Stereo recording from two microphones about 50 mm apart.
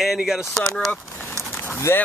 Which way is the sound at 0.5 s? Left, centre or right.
Centre.